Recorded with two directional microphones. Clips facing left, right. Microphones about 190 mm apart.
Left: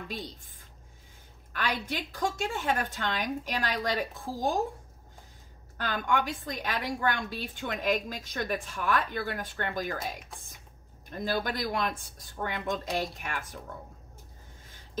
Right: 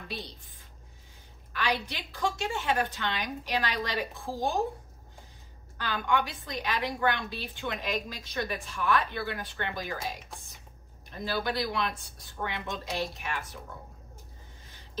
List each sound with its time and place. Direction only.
1.5 s a woman's voice: 50° left (ahead or behind)
5.8 s a woman's voice: 45° left (ahead or behind)
11.1 s a woman's voice: 45° left (ahead or behind)